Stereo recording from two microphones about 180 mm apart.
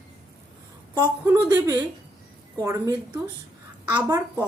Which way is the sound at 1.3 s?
20° right (ahead or behind).